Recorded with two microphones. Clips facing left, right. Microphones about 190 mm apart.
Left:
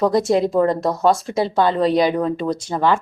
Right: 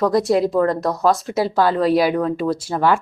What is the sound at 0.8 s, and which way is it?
A woman's voice, centre (ahead or behind).